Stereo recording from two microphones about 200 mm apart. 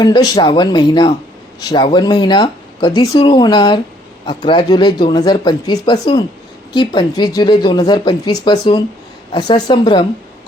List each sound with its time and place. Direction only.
0.0 s speech: 20° left (ahead or behind)